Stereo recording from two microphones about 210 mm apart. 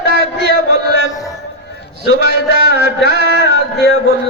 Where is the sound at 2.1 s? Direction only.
50° right (ahead or behind).